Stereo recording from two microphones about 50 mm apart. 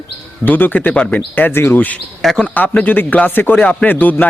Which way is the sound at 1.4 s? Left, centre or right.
Left.